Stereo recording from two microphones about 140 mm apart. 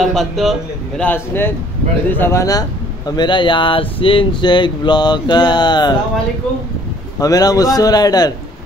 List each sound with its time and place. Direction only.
0.0 s a man's voice: centre (ahead or behind); by 5.9 s 30° left (ahead or behind)
7.2 s a man's voice: 25° left (ahead or behind)